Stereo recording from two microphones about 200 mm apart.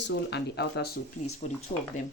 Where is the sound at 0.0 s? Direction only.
55° left (ahead or behind).